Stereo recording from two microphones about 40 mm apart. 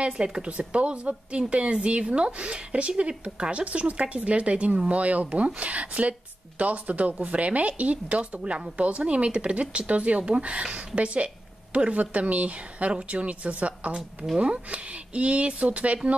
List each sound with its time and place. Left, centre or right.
0.0 s a woman's voice: right